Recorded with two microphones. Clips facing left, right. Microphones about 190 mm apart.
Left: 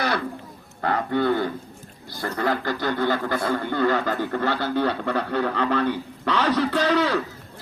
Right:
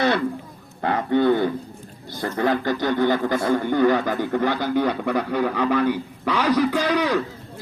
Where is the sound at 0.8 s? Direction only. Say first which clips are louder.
Right 3 dB; 20° right (ahead or behind).